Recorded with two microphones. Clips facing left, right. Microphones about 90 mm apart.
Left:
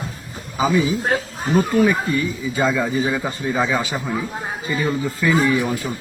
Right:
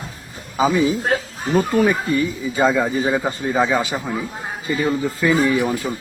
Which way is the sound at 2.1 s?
30° right (ahead or behind).